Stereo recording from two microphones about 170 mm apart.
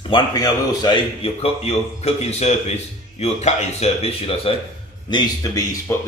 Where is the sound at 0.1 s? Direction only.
25° left (ahead or behind).